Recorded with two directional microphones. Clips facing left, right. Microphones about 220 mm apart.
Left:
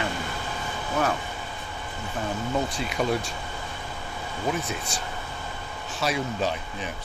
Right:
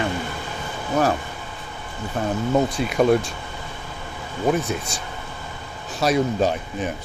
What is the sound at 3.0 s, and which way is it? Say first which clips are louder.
Speech: right 9 dB; 50° right (ahead or behind).